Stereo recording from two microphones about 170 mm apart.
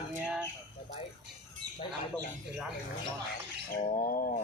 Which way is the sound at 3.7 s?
55° left (ahead or behind).